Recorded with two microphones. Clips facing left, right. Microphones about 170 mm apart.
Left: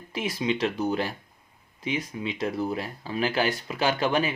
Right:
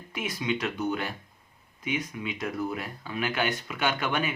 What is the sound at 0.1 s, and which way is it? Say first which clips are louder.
Speech: left 3 dB; 30° left (ahead or behind).